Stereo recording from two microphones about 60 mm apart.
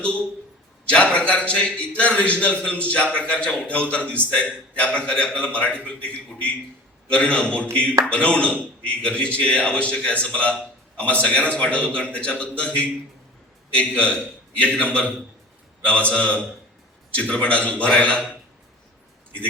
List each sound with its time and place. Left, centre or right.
0.9 s a man's voice: centre
7.1 s a man's voice: left